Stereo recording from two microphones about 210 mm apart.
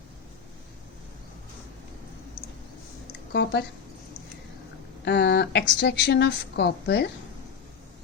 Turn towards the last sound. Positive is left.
turn(degrees=50)  # may be behind; listen again after turning